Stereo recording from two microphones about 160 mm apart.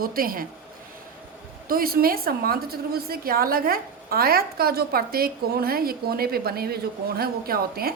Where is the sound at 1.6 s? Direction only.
65° right (ahead or behind).